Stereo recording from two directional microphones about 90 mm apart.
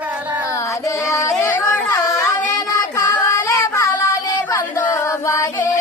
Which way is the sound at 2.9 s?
30° left (ahead or behind).